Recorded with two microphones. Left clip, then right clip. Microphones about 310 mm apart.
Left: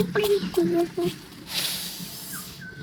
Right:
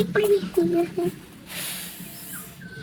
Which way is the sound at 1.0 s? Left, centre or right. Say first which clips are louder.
Even; left.